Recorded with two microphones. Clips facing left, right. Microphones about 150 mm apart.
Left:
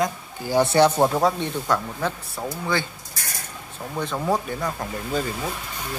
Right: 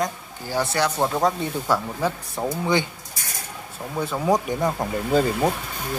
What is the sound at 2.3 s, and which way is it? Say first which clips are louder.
Speech: right 4 dB; 20° right (ahead or behind).